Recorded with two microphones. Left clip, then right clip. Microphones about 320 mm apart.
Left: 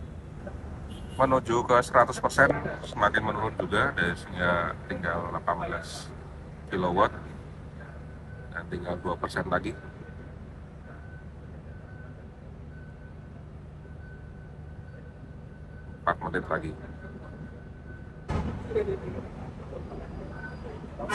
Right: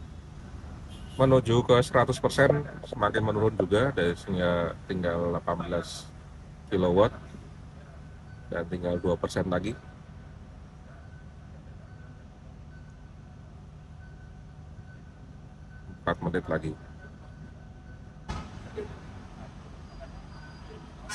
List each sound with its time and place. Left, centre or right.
1.1 s speech: centre
8.5 s speech: right
16.0 s a sound: right